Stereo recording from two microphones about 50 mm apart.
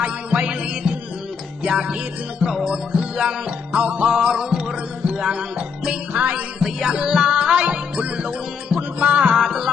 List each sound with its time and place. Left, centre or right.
0.0 s music: right
2.4 s music: centre
3.7 s music: right
4.0 s music: centre
6.1 s music: right
6.8 s music: centre
9.3 s music: centre